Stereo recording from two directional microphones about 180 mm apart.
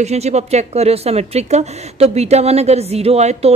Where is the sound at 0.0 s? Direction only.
40° right (ahead or behind).